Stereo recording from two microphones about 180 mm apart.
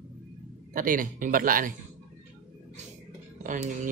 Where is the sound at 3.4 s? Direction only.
45° right (ahead or behind).